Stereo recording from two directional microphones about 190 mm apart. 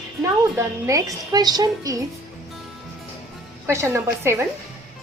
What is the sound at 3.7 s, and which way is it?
Speech, 15° right (ahead or behind).